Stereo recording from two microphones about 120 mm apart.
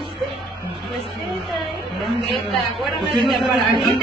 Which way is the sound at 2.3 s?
Centre (ahead or behind).